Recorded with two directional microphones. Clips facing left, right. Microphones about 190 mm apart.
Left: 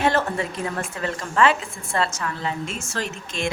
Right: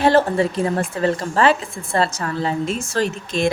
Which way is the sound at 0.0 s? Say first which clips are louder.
Right 7 dB; 35° right (ahead or behind).